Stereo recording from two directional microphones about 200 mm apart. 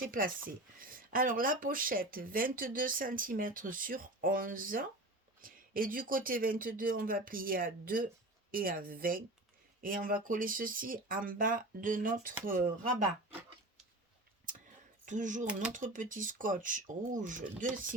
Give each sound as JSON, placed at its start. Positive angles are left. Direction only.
{"t": 0.0, "sound": "speech", "side_deg": -45}
{"t": 15.0, "sound": "speech", "side_deg": -40}